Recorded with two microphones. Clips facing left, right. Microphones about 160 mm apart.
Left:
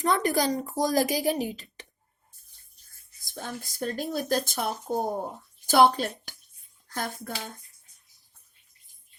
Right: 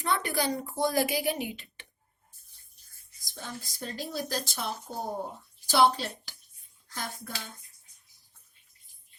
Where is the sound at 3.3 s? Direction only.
50° left (ahead or behind).